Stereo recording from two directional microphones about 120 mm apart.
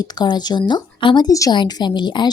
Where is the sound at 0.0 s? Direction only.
35° left (ahead or behind).